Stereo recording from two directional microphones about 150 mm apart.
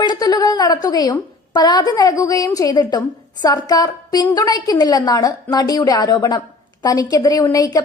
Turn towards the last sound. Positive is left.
turn(degrees=25)  # may be behind; listen again after turning